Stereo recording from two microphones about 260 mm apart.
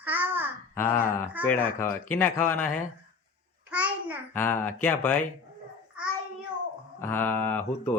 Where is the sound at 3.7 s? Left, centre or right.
Centre.